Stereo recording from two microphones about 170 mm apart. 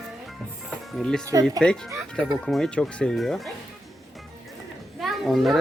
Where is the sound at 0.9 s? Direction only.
5° left (ahead or behind).